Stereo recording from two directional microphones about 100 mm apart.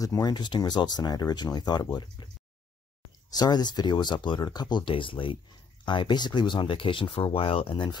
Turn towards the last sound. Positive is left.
turn(degrees=55)  # may be behind; listen again after turning